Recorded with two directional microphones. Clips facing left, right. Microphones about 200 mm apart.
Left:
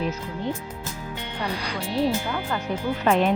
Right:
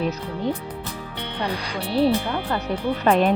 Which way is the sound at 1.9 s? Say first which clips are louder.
Right 4 dB; 35° right (ahead or behind).